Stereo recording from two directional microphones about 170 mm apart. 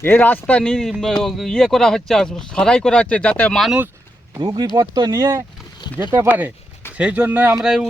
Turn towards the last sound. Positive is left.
turn(degrees=-5)  # may be behind; listen again after turning